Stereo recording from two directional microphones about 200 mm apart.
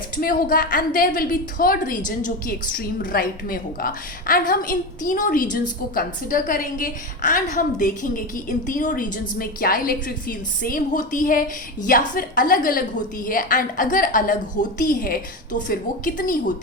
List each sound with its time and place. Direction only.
0.2 s a woman's voice: 45° left (ahead or behind)